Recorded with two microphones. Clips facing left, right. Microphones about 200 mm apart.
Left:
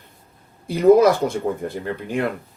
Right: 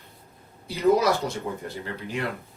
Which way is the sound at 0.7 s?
50° left (ahead or behind).